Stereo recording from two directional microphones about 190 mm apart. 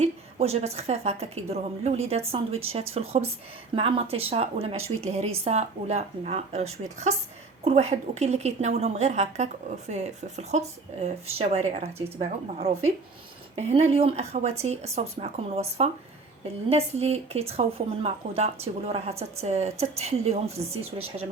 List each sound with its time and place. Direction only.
0.0 s speech: 35° right (ahead or behind)